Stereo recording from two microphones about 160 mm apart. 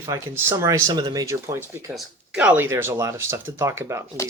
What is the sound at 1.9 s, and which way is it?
Speech, 5° right (ahead or behind).